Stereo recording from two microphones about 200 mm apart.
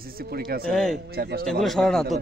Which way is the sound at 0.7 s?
5° left (ahead or behind).